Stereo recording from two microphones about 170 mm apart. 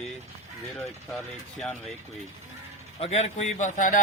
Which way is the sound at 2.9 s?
40° left (ahead or behind).